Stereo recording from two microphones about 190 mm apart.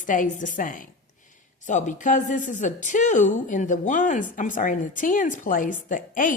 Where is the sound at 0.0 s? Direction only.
45° left (ahead or behind).